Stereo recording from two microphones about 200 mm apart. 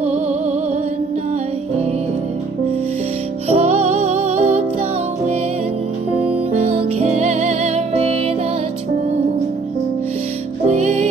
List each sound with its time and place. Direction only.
3.4 s music: 30° right (ahead or behind)
6.2 s music: 30° right (ahead or behind)
10.7 s music: 35° right (ahead or behind)